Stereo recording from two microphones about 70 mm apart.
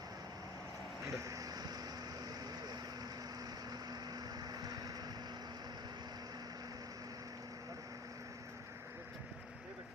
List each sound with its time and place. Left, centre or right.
1.0 s vehicle: right